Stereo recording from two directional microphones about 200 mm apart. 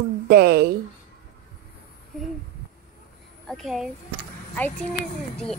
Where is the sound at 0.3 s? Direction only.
50° right (ahead or behind).